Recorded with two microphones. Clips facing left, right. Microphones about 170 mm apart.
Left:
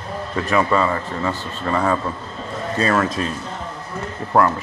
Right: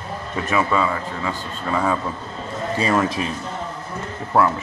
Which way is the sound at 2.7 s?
15° right (ahead or behind).